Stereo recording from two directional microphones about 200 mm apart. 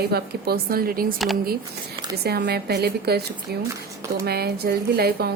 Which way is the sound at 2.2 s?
50° right (ahead or behind).